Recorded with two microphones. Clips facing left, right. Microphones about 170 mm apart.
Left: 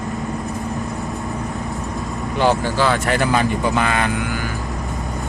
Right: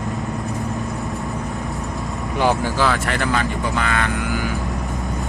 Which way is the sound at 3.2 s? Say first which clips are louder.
Left 3 dB; 15° left (ahead or behind).